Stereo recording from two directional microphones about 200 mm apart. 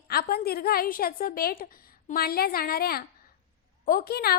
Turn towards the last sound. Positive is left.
turn(degrees=50)  # may be behind; listen again after turning